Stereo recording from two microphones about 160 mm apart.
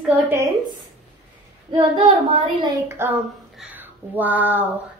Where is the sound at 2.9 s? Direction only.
15° right (ahead or behind).